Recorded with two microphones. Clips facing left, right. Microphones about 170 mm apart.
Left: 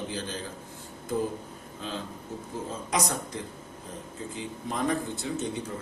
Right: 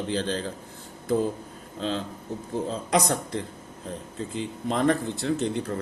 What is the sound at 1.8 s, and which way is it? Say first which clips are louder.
Speech: right 7 dB; 75° right (ahead or behind).